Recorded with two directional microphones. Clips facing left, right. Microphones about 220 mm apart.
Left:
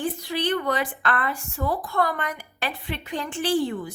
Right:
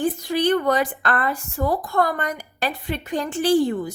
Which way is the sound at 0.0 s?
45° right (ahead or behind).